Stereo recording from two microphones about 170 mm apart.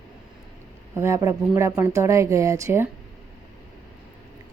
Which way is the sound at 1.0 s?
15° right (ahead or behind).